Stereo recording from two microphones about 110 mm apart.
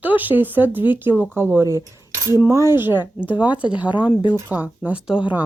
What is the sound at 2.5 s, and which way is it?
Speech, 25° right (ahead or behind).